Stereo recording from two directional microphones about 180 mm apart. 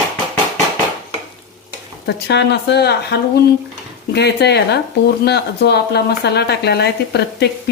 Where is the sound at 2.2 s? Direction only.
70° left (ahead or behind).